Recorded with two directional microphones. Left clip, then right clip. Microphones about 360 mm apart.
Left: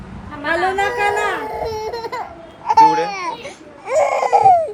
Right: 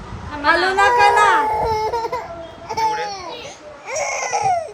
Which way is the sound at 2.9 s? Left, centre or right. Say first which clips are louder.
Left 5 dB; centre.